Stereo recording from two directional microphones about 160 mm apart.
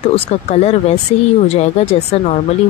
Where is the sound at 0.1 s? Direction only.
40° left (ahead or behind).